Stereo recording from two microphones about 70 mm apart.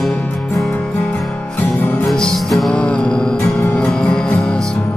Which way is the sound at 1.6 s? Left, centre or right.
Left.